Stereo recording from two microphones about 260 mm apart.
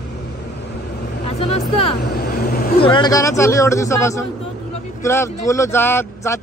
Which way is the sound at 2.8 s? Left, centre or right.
Centre.